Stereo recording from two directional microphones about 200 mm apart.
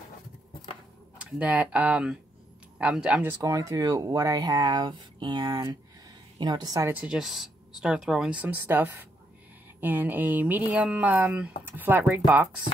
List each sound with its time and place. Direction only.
1.1 s speech: 5° right (ahead or behind)